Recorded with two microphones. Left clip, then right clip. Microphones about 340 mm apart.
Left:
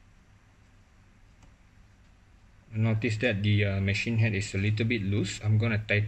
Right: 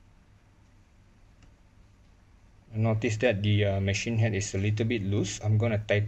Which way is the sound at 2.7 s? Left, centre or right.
Centre.